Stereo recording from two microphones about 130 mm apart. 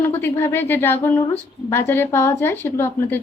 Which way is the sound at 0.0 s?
15° left (ahead or behind).